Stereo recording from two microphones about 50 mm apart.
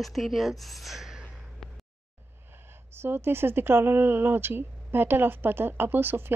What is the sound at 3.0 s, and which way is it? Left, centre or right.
Speech, right.